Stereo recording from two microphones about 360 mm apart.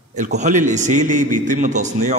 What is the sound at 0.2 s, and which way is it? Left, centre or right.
A man's voice, right.